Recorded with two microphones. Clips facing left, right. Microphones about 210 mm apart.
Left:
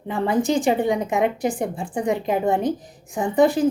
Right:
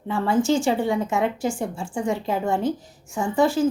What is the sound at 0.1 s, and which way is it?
A woman's voice, 20° left (ahead or behind).